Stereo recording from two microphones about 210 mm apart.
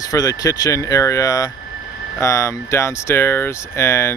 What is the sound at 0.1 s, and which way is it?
Speech, 15° left (ahead or behind).